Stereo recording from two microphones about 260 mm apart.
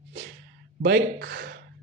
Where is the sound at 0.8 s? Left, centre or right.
Right.